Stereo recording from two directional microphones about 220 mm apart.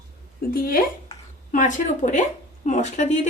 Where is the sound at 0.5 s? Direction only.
40° left (ahead or behind).